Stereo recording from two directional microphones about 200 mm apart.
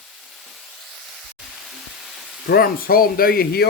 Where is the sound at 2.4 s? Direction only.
50° left (ahead or behind).